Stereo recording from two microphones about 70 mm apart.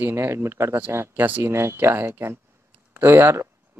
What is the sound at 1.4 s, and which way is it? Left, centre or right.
Speech, right.